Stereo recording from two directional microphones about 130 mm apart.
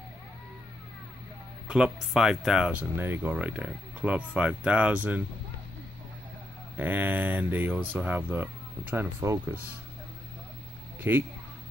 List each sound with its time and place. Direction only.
1.7 s speech: 5° right (ahead or behind)
6.8 s speech: 15° right (ahead or behind)
11.0 s speech: 15° right (ahead or behind)